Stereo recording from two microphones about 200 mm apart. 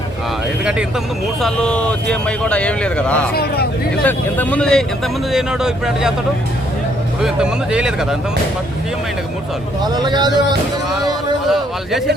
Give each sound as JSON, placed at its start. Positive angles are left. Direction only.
{"t": 0.6, "sound": "speech", "side_deg": -5}
{"t": 3.3, "sound": "speech", "side_deg": 50}
{"t": 4.0, "sound": "speech", "side_deg": 5}
{"t": 7.2, "sound": "speech", "side_deg": -5}
{"t": 9.8, "sound": "speech", "side_deg": -20}
{"t": 11.4, "sound": "a man's voice", "side_deg": 0}